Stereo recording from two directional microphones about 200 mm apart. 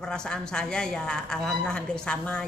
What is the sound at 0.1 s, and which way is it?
A man's voice, 5° left (ahead or behind).